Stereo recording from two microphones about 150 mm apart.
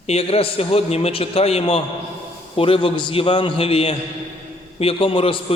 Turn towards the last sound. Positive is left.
turn(degrees=40)  # may be behind; listen again after turning